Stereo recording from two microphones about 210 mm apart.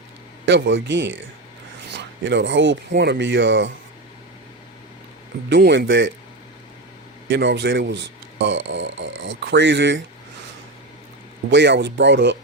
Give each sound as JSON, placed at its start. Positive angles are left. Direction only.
{"t": 0.4, "sound": "speech", "side_deg": -60}
{"t": 5.5, "sound": "speech", "side_deg": -55}
{"t": 7.3, "sound": "speech", "side_deg": -55}
{"t": 11.5, "sound": "speech", "side_deg": -55}